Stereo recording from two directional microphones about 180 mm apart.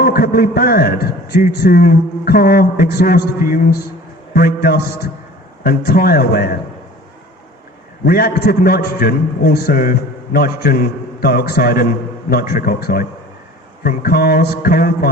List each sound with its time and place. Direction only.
0.0 s a man's voice: 55° left (ahead or behind)
8.0 s a man's voice: 55° left (ahead or behind)